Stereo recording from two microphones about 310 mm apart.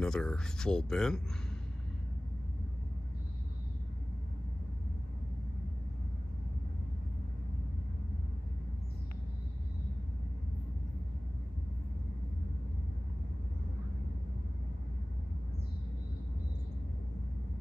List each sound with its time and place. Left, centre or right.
0.0 s speech: centre